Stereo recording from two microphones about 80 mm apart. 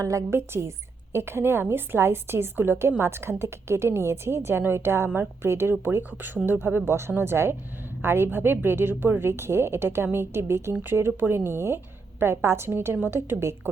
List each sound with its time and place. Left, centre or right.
0.0 s a woman's voice: right